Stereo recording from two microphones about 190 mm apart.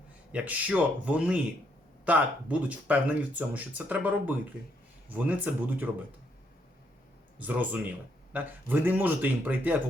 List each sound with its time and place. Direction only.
0.3 s speech: 5° right (ahead or behind)
7.3 s speech: 10° right (ahead or behind)